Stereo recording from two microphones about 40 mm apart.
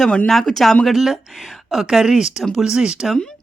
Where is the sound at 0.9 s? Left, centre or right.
Centre.